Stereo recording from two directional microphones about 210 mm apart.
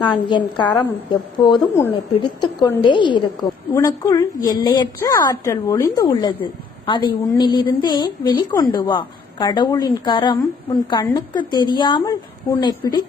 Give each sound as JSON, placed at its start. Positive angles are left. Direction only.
{"t": 0.0, "sound": "a woman's voice", "side_deg": 20}